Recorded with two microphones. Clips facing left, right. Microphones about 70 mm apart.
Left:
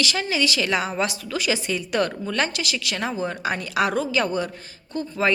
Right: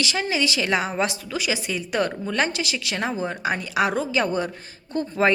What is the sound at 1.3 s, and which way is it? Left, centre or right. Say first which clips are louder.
A woman's voice: left 2 dB; centre.